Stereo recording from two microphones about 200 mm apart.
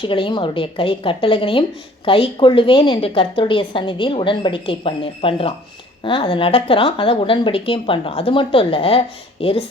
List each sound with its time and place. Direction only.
0.0 s a woman's voice: 25° left (ahead or behind)